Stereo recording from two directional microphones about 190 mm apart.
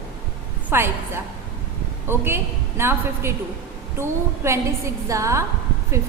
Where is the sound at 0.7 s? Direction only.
15° right (ahead or behind).